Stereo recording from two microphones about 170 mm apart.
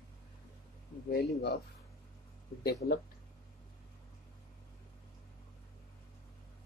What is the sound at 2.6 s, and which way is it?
Speech, 65° left (ahead or behind).